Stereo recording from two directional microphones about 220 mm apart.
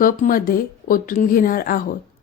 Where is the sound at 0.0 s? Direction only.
40° left (ahead or behind).